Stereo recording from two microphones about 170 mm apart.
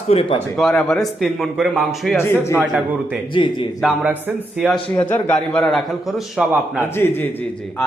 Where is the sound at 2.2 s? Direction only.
15° left (ahead or behind).